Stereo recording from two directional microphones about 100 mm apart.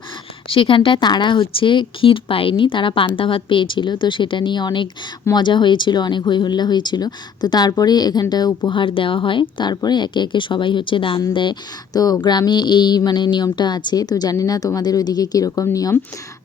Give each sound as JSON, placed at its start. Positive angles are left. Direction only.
{"t": 0.5, "sound": "speech", "side_deg": 60}
{"t": 11.9, "sound": "a woman's voice", "side_deg": 40}